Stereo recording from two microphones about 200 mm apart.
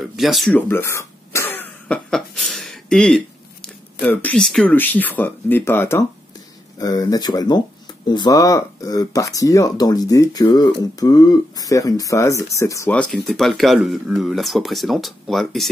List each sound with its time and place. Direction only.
0.0 s throat clearing: centre (ahead or behind)
3.6 s speech: 10° left (ahead or behind)